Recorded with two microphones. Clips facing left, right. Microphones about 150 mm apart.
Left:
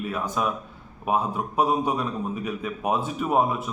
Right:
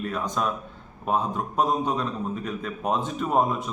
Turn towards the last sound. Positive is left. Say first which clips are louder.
# left 1 dB
turn(degrees=5)  # may be behind; listen again after turning